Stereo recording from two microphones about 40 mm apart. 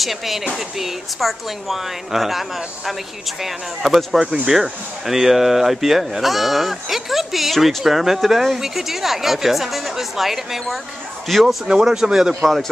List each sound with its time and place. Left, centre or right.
0.0 s speech: centre
11.6 s a man's voice: centre